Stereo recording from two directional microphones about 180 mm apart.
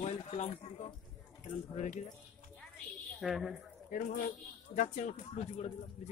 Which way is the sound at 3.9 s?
45° left (ahead or behind).